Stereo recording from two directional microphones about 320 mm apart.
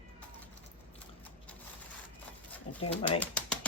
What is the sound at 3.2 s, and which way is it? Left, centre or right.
Pigeon, centre.